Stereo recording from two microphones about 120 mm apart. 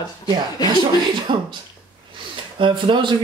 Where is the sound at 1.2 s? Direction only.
40° right (ahead or behind).